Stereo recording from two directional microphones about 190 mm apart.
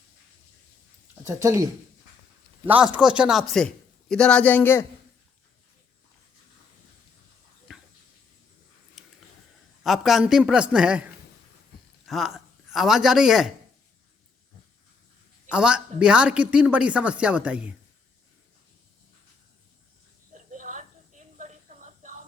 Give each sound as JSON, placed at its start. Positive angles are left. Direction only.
{"t": 1.2, "sound": "speech", "side_deg": -15}
{"t": 2.8, "sound": "a woman's voice", "side_deg": -5}
{"t": 7.7, "sound": "a sound", "side_deg": 0}
{"t": 9.8, "sound": "a woman's voice", "side_deg": 0}
{"t": 12.0, "sound": "speech", "side_deg": 0}
{"t": 15.4, "sound": "a woman's voice", "side_deg": -5}
{"t": 20.3, "sound": "a sound", "side_deg": -40}